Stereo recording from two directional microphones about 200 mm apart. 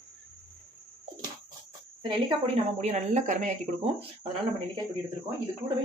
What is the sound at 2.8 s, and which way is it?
Speech, 35° right (ahead or behind).